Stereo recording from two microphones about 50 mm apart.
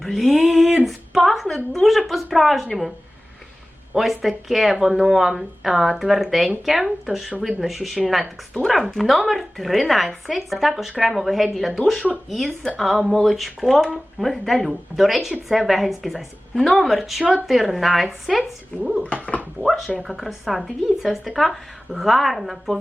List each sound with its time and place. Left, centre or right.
0.0 s a sound: centre
3.9 s a woman's voice: centre
19.0 s speech: left
19.6 s speech: centre